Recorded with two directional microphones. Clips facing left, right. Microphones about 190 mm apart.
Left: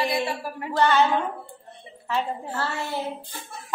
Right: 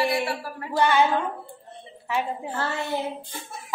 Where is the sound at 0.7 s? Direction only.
10° right (ahead or behind).